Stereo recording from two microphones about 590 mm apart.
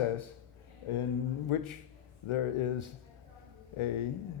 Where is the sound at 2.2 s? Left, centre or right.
Left.